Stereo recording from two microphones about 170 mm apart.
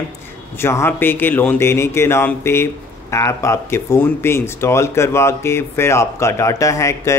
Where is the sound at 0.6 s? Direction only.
15° left (ahead or behind).